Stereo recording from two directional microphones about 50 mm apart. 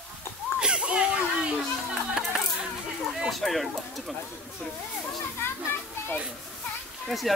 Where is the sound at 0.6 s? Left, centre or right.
Centre.